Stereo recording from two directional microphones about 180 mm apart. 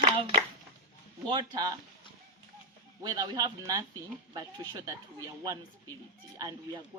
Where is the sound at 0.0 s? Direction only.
30° right (ahead or behind).